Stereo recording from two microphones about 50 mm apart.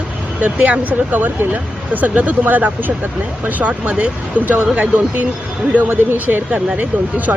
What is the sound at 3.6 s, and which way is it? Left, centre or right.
Speech, right.